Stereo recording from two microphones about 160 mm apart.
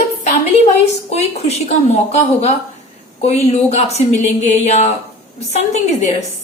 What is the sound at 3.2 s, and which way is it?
A woman's voice, 45° left (ahead or behind).